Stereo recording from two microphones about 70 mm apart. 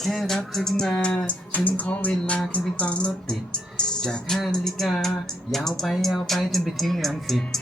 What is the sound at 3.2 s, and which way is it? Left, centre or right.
Speech, centre.